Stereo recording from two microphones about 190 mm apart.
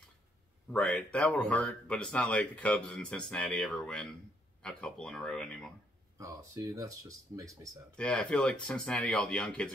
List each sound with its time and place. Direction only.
0.7 s speech: 5° left (ahead or behind)
6.1 s speech: 15° right (ahead or behind)
7.9 s speech: 5° left (ahead or behind)